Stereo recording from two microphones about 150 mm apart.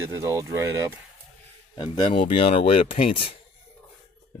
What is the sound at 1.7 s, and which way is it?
Speech, 35° left (ahead or behind).